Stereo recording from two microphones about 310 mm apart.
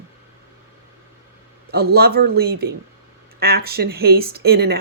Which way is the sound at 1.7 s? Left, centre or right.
Right.